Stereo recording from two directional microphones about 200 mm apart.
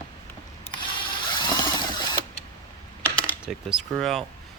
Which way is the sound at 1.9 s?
20° left (ahead or behind).